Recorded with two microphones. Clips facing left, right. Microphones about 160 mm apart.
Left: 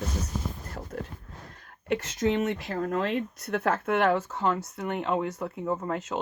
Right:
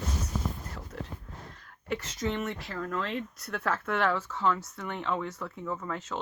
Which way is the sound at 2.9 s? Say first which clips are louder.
Left 5 dB; 55° left (ahead or behind).